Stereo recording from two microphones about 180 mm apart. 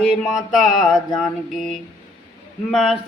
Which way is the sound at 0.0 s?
5° left (ahead or behind).